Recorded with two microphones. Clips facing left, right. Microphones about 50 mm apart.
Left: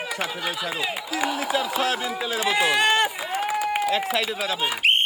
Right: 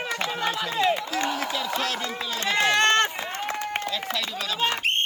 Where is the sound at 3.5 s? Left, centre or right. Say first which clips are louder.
Left 7 dB; centre.